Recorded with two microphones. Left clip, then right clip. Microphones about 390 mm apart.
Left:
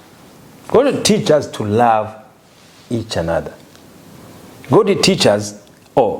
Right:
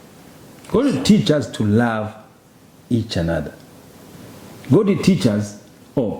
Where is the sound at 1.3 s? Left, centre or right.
Left.